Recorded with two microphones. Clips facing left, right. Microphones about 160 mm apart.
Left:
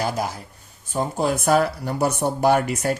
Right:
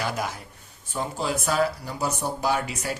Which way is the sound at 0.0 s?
35° left (ahead or behind).